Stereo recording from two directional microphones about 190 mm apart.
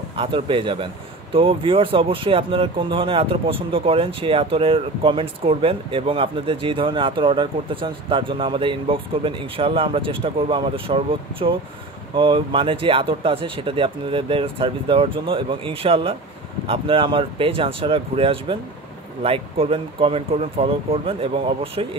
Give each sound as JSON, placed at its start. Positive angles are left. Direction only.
{"t": 0.1, "sound": "speech", "side_deg": -30}